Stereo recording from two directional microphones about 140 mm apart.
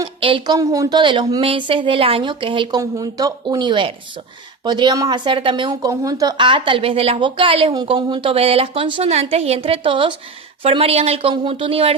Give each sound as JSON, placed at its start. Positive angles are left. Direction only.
{"t": 0.0, "sound": "a woman's voice", "side_deg": -40}
{"t": 2.9, "sound": "a woman's voice", "side_deg": -25}
{"t": 5.9, "sound": "a woman's voice", "side_deg": -25}